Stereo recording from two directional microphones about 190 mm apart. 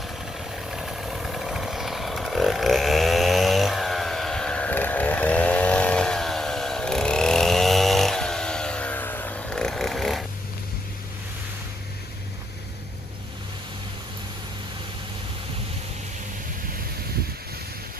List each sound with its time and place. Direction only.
0.3 s vehicle: centre (ahead or behind)